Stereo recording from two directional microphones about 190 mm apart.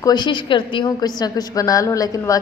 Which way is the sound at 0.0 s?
20° left (ahead or behind).